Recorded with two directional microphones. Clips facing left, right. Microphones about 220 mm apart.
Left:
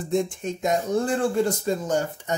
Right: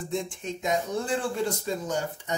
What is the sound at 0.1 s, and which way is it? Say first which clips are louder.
Speech: left 8 dB; 45° left (ahead or behind).